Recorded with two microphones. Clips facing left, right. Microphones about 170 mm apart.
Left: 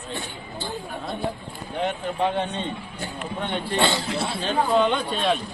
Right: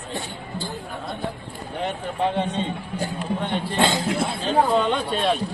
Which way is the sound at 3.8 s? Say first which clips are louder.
Right 4 dB; 45° right (ahead or behind).